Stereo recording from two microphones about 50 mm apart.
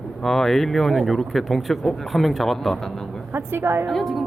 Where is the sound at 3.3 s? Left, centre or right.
Right.